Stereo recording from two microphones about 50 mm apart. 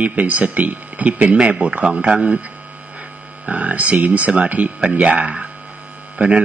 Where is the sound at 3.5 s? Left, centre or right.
Right.